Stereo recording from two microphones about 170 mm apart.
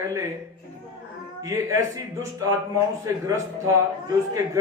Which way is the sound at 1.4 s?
15° right (ahead or behind).